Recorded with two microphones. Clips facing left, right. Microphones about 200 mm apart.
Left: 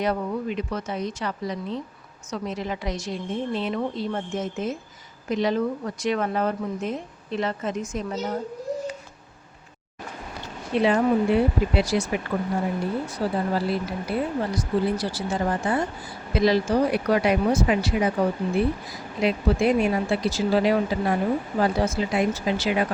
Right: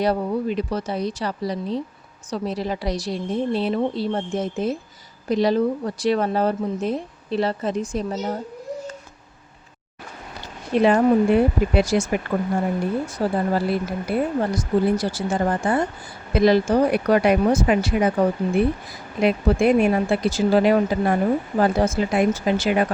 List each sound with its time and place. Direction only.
0.0 s speech: 35° right (ahead or behind)
10.8 s speech: 50° right (ahead or behind)
19.2 s speech: 55° right (ahead or behind)